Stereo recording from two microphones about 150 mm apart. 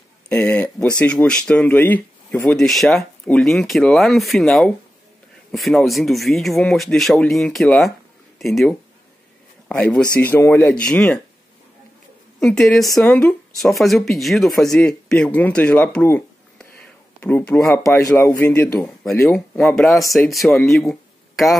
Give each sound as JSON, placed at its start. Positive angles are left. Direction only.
{"t": 0.3, "sound": "speech", "side_deg": 10}
{"t": 12.4, "sound": "speech", "side_deg": 5}
{"t": 20.0, "sound": "speech", "side_deg": 20}
{"t": 20.2, "sound": "speech", "side_deg": 0}